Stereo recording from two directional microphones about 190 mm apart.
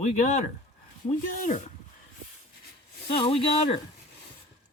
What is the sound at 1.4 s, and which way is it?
Speech, 40° left (ahead or behind).